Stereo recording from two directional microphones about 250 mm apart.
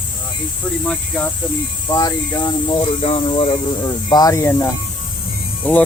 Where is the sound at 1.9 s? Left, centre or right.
Centre.